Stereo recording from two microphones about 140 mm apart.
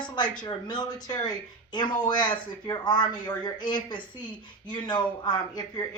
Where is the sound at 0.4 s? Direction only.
30° left (ahead or behind).